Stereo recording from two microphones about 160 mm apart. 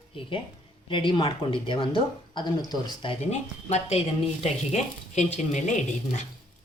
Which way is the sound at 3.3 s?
45° left (ahead or behind).